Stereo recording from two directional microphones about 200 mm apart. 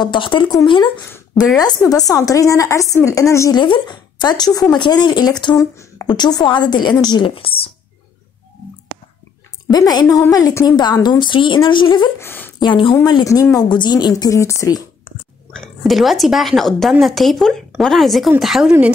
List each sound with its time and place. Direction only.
0.0 s a woman's voice: 25° left (ahead or behind)
9.7 s a woman's voice: 20° left (ahead or behind)
12.3 s a woman's voice: 10° left (ahead or behind)
12.5 s a woman's voice: 25° left (ahead or behind)
15.5 s a woman's voice: centre (ahead or behind)